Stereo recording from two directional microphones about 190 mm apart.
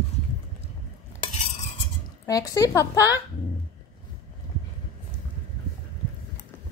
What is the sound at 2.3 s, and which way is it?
Speech, 20° left (ahead or behind).